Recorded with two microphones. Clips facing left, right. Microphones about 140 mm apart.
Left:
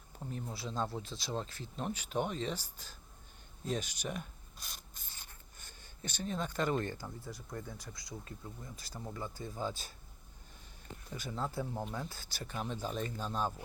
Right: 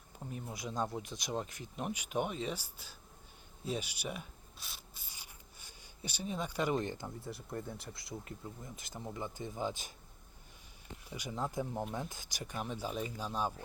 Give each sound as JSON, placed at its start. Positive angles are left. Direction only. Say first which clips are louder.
{"t": 0.2, "sound": "speech", "louder": "left 1 dB", "side_deg": -5}
{"t": 11.0, "sound": "speech", "louder": "even", "side_deg": -10}
{"t": 11.9, "sound": "speech", "louder": "right 1 dB", "side_deg": -15}